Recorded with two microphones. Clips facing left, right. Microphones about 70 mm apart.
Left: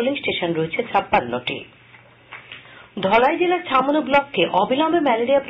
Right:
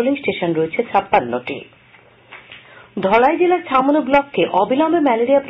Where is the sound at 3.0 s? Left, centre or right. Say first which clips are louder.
Right 3 dB; centre.